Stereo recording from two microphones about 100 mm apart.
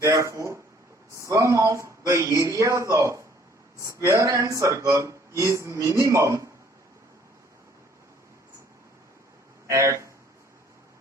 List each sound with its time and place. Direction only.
0.0 s speech: 30° right (ahead or behind)
9.6 s speech: 30° right (ahead or behind)